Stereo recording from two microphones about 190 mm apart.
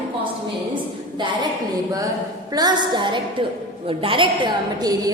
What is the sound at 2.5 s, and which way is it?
A woman's voice, 20° right (ahead or behind).